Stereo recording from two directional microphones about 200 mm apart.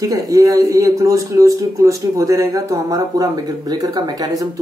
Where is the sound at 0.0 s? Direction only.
15° right (ahead or behind).